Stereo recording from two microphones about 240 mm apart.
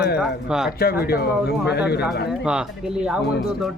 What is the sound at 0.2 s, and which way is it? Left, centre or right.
Speech, centre.